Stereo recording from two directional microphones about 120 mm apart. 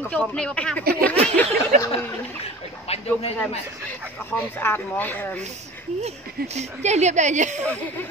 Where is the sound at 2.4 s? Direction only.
55° left (ahead or behind).